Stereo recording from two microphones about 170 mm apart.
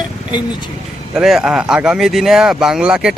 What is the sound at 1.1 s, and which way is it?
Speech, centre (ahead or behind).